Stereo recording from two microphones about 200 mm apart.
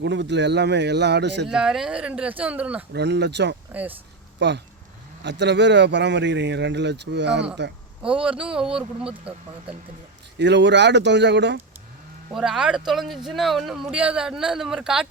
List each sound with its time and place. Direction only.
0.0 s speech: 60° right (ahead or behind)
1.5 s a man's voice: 5° right (ahead or behind)
2.9 s speech: 60° right (ahead or behind)
3.7 s speech: 10° right (ahead or behind)
4.4 s speech: 60° right (ahead or behind)
8.0 s a man's voice: 5° right (ahead or behind)
10.3 s speech: 60° right (ahead or behind)
12.3 s a man's voice: 5° right (ahead or behind)